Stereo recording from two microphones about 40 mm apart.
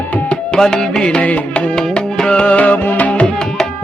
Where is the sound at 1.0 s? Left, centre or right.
Left.